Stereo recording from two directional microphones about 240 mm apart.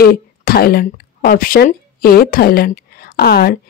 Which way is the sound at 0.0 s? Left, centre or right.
Left.